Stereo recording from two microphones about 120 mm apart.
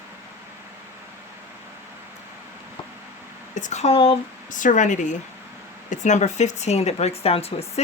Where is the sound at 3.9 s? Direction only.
50° left (ahead or behind).